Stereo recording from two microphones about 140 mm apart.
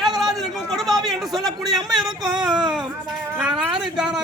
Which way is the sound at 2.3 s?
30° right (ahead or behind).